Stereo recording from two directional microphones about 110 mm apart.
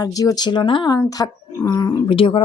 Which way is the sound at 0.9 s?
35° left (ahead or behind).